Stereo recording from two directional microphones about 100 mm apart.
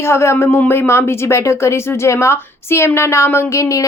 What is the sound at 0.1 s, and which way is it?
Speech, 25° left (ahead or behind).